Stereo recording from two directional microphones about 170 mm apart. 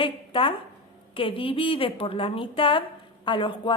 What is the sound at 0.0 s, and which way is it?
A woman's voice, 30° left (ahead or behind).